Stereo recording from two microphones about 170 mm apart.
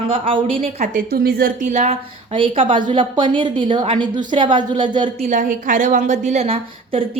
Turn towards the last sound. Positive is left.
turn(degrees=-35)  # may be behind; listen again after turning